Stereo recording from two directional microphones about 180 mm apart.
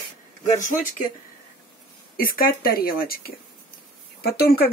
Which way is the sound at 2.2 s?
50° left (ahead or behind).